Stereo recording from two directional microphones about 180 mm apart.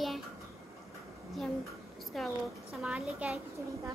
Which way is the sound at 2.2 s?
Centre (ahead or behind).